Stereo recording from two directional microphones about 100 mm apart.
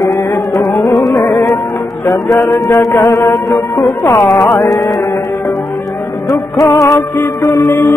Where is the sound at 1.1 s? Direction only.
35° left (ahead or behind).